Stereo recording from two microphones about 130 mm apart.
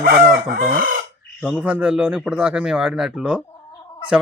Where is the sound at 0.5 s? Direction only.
90° right.